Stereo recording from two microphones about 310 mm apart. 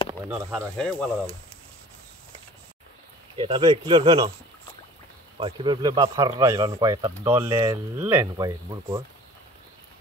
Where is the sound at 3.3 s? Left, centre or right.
Centre.